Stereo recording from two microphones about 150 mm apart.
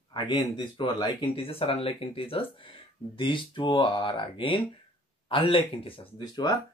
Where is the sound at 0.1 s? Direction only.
30° left (ahead or behind).